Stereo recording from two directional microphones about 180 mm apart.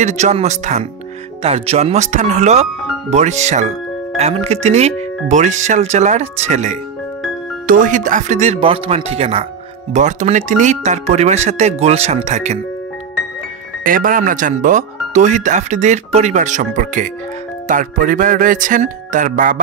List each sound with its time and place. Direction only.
0.0 s speech: 40° right (ahead or behind)
13.8 s speech: 50° right (ahead or behind)